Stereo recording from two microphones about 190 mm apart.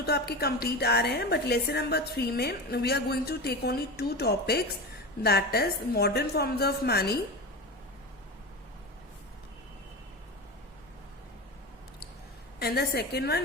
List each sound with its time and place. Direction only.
0.0 s a woman's voice: 55° left (ahead or behind)
12.5 s a woman's voice: 55° left (ahead or behind)